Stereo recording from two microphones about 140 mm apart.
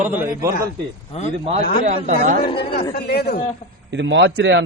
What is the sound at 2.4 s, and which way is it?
Speech, 35° left (ahead or behind).